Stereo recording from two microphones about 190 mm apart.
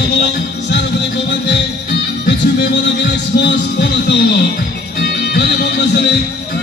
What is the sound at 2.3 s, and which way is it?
Speech, 65° left (ahead or behind).